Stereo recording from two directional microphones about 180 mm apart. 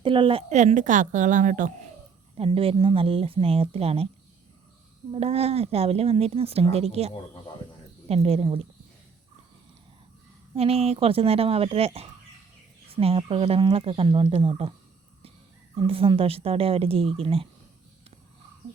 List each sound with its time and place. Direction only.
0.0 s a woman's voice: 30° right (ahead or behind); by 1.9 s 45° right (ahead or behind)
2.3 s speech: 30° right (ahead or behind)
5.1 s speech: 35° right (ahead or behind)
10.5 s speech: 35° right (ahead or behind)
12.9 s speech: 30° right (ahead or behind)
15.8 s speech: 30° right (ahead or behind)